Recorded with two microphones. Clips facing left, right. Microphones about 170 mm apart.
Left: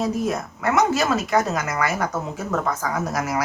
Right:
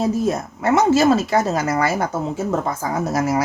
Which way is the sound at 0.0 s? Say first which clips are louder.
Right 4 dB; 30° right (ahead or behind).